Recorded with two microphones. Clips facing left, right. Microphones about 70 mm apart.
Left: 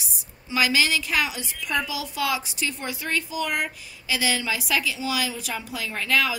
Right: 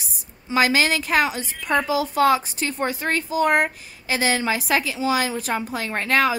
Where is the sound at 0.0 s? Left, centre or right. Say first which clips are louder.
Even; right.